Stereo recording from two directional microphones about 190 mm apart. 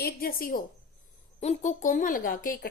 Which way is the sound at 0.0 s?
50° left (ahead or behind).